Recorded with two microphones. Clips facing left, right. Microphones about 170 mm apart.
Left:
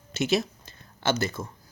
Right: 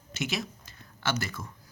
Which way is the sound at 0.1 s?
30° left (ahead or behind).